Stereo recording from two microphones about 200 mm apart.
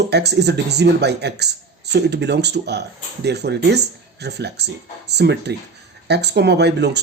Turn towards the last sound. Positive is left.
turn(degrees=-55)  # may be behind; listen again after turning